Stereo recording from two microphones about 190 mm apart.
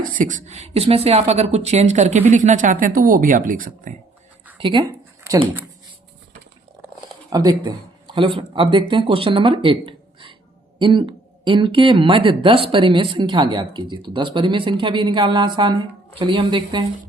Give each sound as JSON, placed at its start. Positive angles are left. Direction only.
{"t": 0.0, "sound": "speech", "side_deg": -45}
{"t": 4.5, "sound": "speech", "side_deg": -25}
{"t": 7.3, "sound": "speech", "side_deg": -20}